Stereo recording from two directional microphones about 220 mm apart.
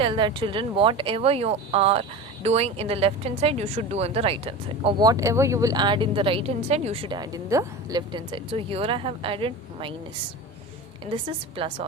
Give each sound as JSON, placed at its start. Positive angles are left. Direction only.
{"t": 0.0, "sound": "speech", "side_deg": -25}
{"t": 11.1, "sound": "speech", "side_deg": -25}